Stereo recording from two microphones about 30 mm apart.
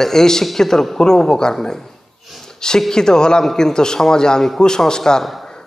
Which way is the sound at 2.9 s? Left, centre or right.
Left.